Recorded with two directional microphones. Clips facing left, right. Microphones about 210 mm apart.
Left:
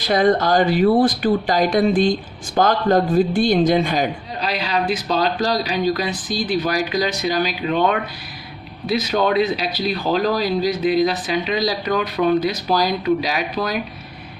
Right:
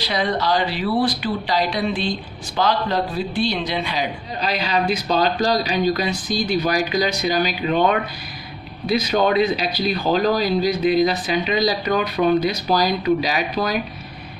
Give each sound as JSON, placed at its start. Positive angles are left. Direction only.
{"t": 0.0, "sound": "speech", "side_deg": 50}
{"t": 4.4, "sound": "speech", "side_deg": 0}